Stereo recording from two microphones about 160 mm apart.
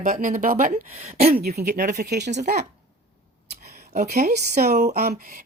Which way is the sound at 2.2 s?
50° right (ahead or behind).